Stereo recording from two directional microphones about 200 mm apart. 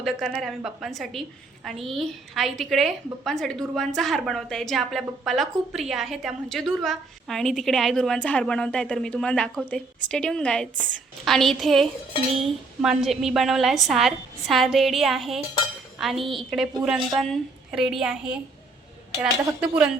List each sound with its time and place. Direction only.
0.0 s a woman's voice: centre (ahead or behind)